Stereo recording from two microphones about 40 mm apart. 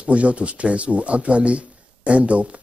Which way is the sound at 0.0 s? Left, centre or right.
Right.